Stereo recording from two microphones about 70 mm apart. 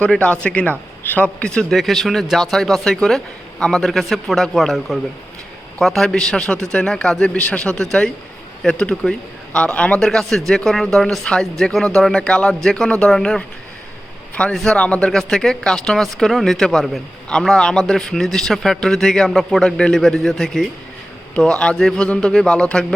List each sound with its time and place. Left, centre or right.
0.0 s a man's voice: centre
1.7 s a man's voice: centre
14.5 s a man's voice: centre